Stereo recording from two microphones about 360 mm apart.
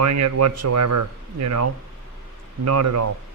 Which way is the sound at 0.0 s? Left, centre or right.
Right.